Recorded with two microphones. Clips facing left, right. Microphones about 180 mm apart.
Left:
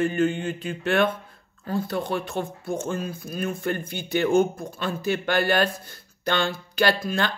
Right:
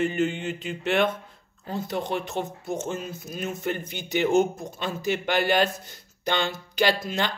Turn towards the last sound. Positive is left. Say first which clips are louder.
# left 1 dB
turn(degrees=-20)  # may be behind; listen again after turning